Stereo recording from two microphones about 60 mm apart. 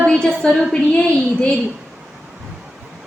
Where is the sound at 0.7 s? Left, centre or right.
Centre.